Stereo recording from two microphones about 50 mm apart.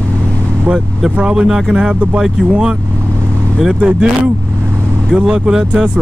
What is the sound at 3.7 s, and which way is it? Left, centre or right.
Speech, right.